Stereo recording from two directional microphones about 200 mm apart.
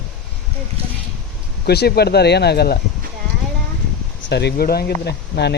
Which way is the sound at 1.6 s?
55° left (ahead or behind).